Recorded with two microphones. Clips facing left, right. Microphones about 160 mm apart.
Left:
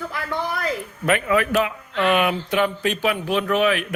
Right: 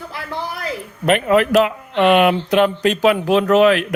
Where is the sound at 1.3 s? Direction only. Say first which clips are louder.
Right 8 dB; 65° right (ahead or behind); by 3.7 s 90° right.